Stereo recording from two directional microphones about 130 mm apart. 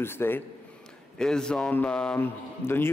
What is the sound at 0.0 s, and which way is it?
Speech, 15° left (ahead or behind).